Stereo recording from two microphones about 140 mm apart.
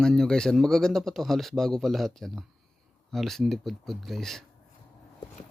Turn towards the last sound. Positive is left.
turn(degrees=0)  # may be behind; listen again after turning